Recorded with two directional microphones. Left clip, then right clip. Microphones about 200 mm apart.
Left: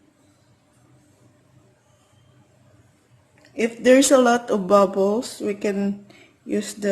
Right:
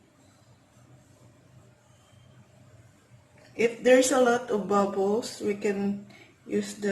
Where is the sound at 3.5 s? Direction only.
50° left (ahead or behind).